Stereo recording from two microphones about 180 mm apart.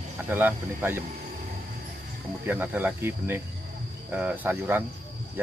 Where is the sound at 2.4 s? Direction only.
10° right (ahead or behind).